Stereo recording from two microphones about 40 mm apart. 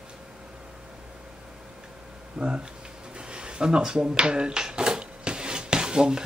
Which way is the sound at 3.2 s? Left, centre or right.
Right.